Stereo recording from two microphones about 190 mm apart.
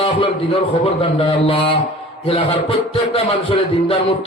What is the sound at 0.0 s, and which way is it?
A man's voice, 30° left (ahead or behind).